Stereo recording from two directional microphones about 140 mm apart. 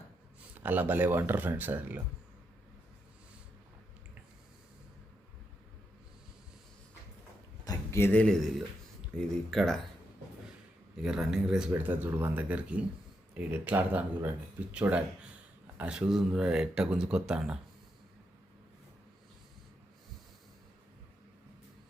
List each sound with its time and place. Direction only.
0.5 s speech: 10° right (ahead or behind)
7.6 s a sound: 20° left (ahead or behind)
9.5 s speech: 5° left (ahead or behind)
11.0 s speech: 5° right (ahead or behind)